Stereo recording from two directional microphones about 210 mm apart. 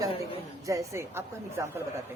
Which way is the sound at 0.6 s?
15° right (ahead or behind).